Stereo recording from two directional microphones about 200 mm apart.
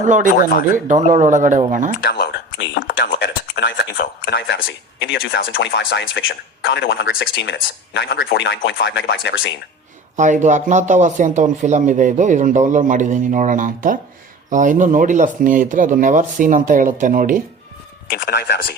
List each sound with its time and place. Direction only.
0.0 s speech: 40° right (ahead or behind)
2.0 s a sound: 55° left (ahead or behind)
5.5 s speech: 65° left (ahead or behind)
10.2 s speech: 35° right (ahead or behind)
18.1 s speech: 50° left (ahead or behind)